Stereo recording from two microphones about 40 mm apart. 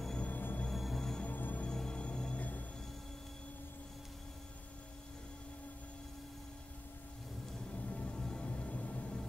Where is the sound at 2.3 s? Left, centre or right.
Left.